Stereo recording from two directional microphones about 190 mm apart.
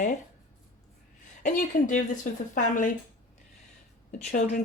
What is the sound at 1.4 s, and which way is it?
Speech, 45° left (ahead or behind).